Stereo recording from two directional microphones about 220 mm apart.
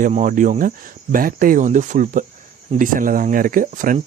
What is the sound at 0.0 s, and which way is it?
Speech, 35° right (ahead or behind).